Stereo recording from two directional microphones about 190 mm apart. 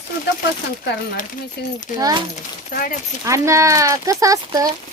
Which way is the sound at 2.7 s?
45° left (ahead or behind).